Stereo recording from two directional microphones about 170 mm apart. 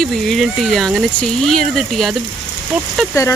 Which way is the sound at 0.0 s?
Centre (ahead or behind).